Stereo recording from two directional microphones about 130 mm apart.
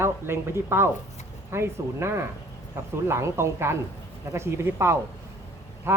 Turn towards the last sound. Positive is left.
turn(degrees=-20)  # may be behind; listen again after turning